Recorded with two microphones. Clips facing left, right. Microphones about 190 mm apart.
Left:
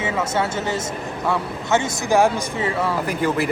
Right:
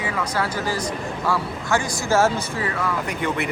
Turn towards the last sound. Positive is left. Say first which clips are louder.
# left 4 dB
turn(degrees=30)  # may be behind; listen again after turning